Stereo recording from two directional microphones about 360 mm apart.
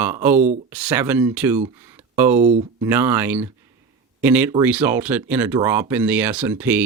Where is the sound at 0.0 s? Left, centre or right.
Centre.